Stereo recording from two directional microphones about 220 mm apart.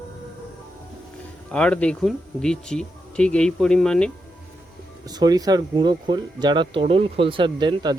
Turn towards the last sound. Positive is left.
turn(degrees=-20)  # may be behind; listen again after turning